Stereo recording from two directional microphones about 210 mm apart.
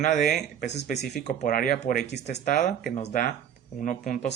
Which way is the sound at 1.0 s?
50° left (ahead or behind).